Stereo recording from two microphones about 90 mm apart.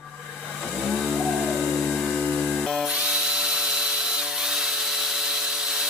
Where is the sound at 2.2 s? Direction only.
15° left (ahead or behind).